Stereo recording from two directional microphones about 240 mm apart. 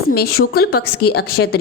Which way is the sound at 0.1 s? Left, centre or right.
Left.